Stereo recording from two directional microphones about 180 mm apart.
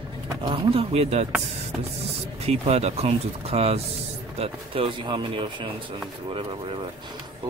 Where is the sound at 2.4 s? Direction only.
35° right (ahead or behind).